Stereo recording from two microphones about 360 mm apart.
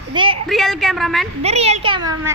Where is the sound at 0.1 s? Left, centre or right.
Centre.